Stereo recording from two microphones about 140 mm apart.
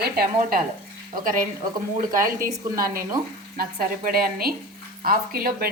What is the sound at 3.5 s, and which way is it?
Speech, 90° right.